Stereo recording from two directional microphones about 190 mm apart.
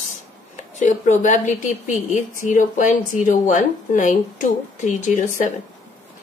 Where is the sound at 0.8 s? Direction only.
40° left (ahead or behind).